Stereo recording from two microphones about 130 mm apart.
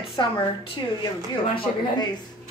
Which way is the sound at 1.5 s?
35° left (ahead or behind).